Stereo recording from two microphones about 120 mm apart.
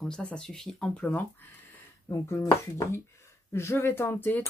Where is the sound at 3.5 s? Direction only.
20° left (ahead or behind).